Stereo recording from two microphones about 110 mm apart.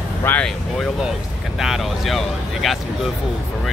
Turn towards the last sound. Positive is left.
turn(degrees=0)  # may be behind; listen again after turning